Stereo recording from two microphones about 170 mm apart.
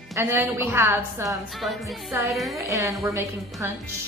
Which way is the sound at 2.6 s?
15° right (ahead or behind).